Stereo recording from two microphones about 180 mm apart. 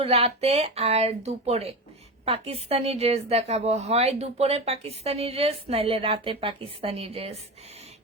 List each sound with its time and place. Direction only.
0.0 s a woman's voice: 35° right (ahead or behind)